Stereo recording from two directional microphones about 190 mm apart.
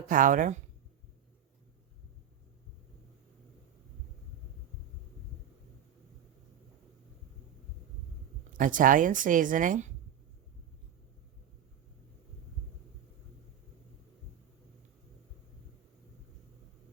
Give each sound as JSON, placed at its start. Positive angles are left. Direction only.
{"t": 0.1, "sound": "a woman's voice", "side_deg": -45}
{"t": 8.5, "sound": "a woman's voice", "side_deg": -45}